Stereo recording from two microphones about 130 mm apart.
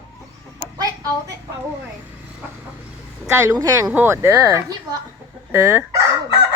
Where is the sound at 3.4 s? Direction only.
25° right (ahead or behind).